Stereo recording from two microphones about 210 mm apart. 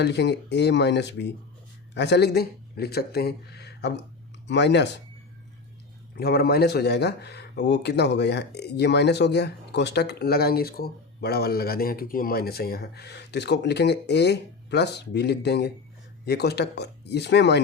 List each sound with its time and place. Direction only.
0.0 s speech: 55° left (ahead or behind)
6.1 s speech: 50° left (ahead or behind)